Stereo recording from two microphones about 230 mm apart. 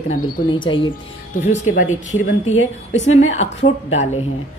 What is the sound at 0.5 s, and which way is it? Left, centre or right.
Speech, left.